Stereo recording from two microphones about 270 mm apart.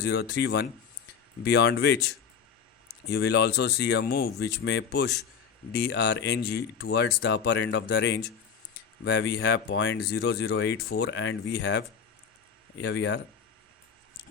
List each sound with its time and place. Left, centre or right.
0.0 s speech: left